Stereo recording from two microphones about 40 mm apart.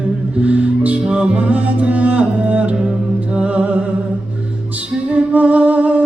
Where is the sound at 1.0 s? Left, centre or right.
Right.